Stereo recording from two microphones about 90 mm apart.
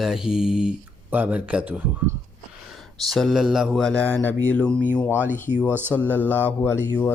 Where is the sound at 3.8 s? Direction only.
10° left (ahead or behind).